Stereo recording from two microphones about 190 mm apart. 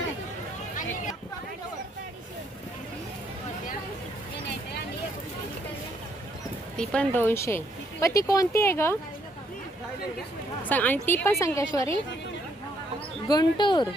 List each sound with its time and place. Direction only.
6.7 s a woman's voice: 5° left (ahead or behind)
10.6 s a woman's voice: 10° left (ahead or behind)
13.2 s speech: 20° left (ahead or behind)